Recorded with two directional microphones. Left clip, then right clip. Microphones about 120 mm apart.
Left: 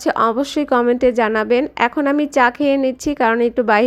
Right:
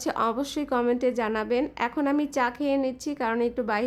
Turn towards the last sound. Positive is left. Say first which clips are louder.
# left 12 dB
turn(degrees=50)  # may be behind; listen again after turning